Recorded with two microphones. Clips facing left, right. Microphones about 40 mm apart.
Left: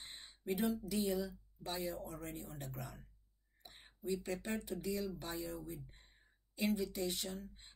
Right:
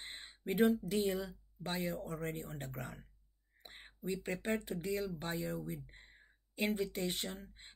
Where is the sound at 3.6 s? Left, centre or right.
Right.